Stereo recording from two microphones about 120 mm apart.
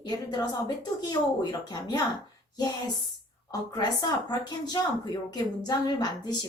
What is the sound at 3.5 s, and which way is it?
Speech, 35° left (ahead or behind).